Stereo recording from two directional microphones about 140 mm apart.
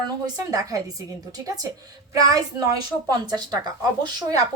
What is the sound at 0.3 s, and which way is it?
Speech, 25° right (ahead or behind).